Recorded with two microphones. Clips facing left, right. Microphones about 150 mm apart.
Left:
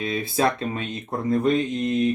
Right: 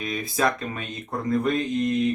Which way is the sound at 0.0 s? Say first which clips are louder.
Left 2 dB; 30° left (ahead or behind).